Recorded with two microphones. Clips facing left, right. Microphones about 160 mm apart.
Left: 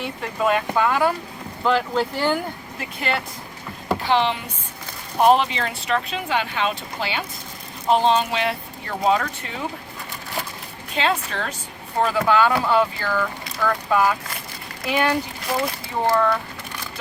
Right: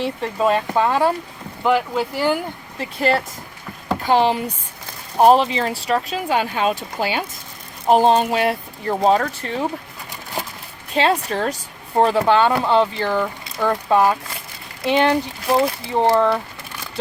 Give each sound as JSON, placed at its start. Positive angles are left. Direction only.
{"t": 0.0, "sound": "speech", "side_deg": -30}
{"t": 1.6, "sound": "speech", "side_deg": -10}
{"t": 2.7, "sound": "speech", "side_deg": -35}
{"t": 10.9, "sound": "speech", "side_deg": -40}